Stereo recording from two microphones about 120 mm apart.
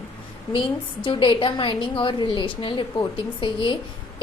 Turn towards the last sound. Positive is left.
turn(degrees=45)  # may be behind; listen again after turning